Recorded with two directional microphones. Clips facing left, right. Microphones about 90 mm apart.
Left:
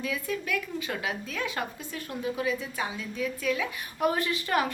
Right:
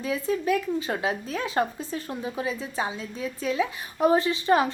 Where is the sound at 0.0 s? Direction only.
30° right (ahead or behind).